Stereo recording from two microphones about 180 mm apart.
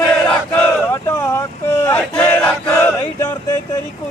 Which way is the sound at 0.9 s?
15° left (ahead or behind).